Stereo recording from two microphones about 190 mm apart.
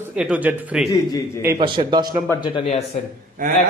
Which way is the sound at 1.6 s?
25° right (ahead or behind).